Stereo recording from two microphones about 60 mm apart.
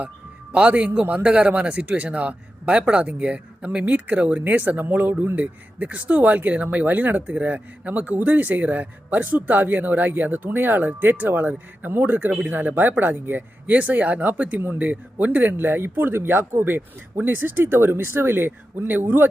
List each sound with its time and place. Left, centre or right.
0.5 s speech: right